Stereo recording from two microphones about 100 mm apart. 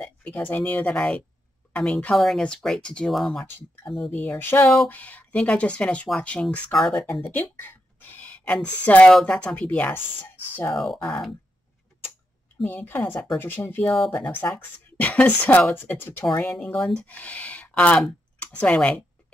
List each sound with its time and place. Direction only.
0.0 s speech: 15° left (ahead or behind)
2.1 s speech: centre (ahead or behind)
4.3 s a woman's voice: 25° left (ahead or behind); by 7.1 s centre (ahead or behind)
7.2 s a sound: 20° left (ahead or behind)
8.8 s speech: 15° left (ahead or behind)
10.7 s speech: centre (ahead or behind)
12.6 s a woman's voice: 20° left (ahead or behind)
14.2 s a woman's voice: 15° left (ahead or behind)